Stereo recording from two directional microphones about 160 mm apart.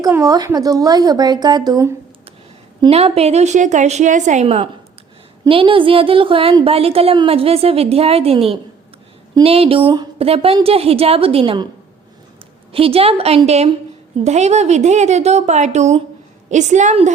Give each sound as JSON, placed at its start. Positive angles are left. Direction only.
{"t": 0.0, "sound": "speech", "side_deg": -20}
{"t": 2.9, "sound": "a woman's voice", "side_deg": -40}
{"t": 12.7, "sound": "a woman's voice", "side_deg": -35}